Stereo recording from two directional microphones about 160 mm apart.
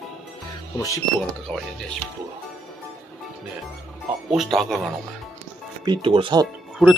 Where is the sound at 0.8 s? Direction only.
20° left (ahead or behind).